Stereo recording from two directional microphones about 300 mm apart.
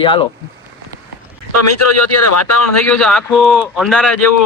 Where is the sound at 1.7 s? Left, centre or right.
Left.